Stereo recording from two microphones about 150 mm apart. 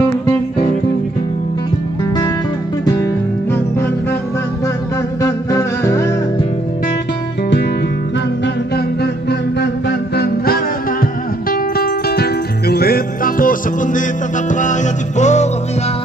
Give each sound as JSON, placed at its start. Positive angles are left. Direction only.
{"t": 5.2, "sound": "music", "side_deg": 25}
{"t": 8.7, "sound": "music", "side_deg": 90}